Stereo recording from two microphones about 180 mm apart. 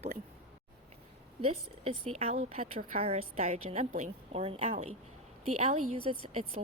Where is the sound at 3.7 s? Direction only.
45° right (ahead or behind).